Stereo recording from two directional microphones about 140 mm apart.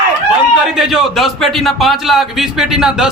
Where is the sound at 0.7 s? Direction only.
Centre (ahead or behind).